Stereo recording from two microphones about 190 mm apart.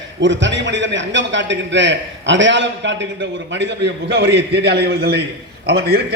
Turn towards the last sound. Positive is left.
turn(degrees=-55)  # may be behind; listen again after turning